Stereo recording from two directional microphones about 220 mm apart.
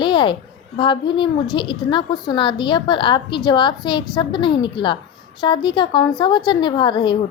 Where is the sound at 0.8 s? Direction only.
20° left (ahead or behind).